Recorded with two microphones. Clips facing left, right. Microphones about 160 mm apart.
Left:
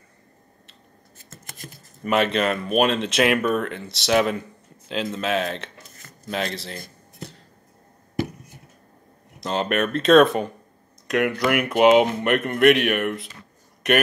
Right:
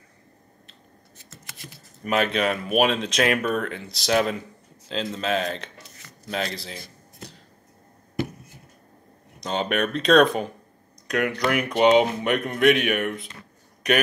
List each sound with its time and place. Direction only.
1.3 s scissors: 50° left (ahead or behind)
2.0 s speech: centre (ahead or behind)
5.8 s a sound: 50° left (ahead or behind)
6.3 s speech: centre (ahead or behind)
9.4 s speech: centre (ahead or behind)